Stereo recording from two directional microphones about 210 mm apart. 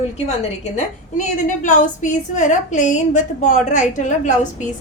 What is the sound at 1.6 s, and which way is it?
A woman's voice, 35° left (ahead or behind).